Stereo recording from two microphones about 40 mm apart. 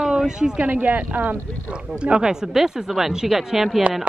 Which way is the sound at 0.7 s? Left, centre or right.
Right.